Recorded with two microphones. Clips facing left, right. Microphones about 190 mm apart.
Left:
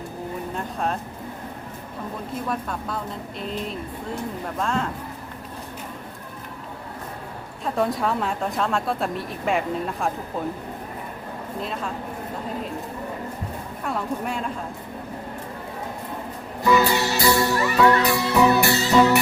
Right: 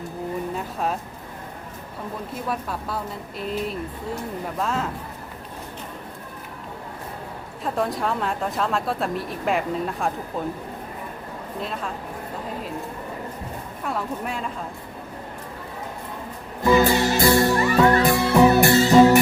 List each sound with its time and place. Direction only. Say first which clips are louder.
0.5 s music: even; 5° right (ahead or behind)
2.5 s a woman's voice: right 2 dB; 5° right (ahead or behind)
7.6 s a woman's voice: left 1 dB; centre (ahead or behind)
11.6 s a woman's voice: even; centre (ahead or behind)
13.8 s a woman's voice: left 1 dB; centre (ahead or behind)
16.7 s music: right 3 dB; 50° right (ahead or behind)